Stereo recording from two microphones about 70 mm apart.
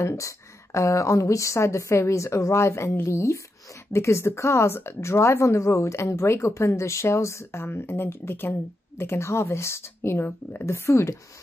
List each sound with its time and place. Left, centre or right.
0.0 s a woman's voice: left